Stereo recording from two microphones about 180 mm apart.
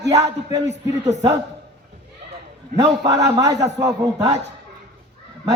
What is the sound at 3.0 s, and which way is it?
Speech, 20° right (ahead or behind).